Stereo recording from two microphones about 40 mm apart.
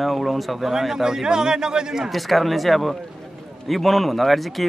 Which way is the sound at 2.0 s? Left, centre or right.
Centre.